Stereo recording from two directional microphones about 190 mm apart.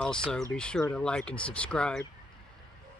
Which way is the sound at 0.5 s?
5° left (ahead or behind).